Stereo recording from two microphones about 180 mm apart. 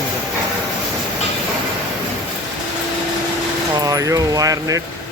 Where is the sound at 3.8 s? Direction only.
20° right (ahead or behind).